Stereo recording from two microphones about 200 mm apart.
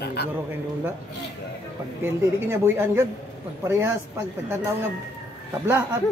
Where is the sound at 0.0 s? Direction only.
55° left (ahead or behind).